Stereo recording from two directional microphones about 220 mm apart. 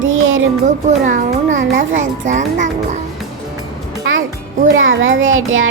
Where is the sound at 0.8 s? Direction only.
35° right (ahead or behind).